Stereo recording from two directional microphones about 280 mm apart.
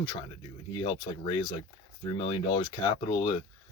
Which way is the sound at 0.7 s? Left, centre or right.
Centre.